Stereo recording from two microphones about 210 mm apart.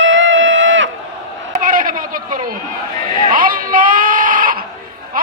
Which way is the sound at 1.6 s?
40° right (ahead or behind).